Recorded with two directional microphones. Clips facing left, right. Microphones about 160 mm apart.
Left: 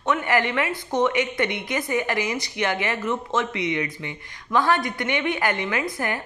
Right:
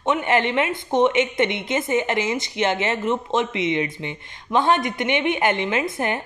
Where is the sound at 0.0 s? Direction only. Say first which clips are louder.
Right 2 dB; 25° right (ahead or behind).